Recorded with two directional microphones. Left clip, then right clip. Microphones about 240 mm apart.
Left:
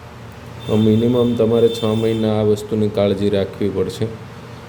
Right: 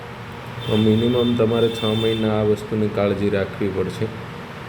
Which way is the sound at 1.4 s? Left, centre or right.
Centre.